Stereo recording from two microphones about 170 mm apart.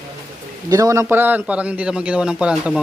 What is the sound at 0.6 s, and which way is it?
A man's voice, 20° right (ahead or behind).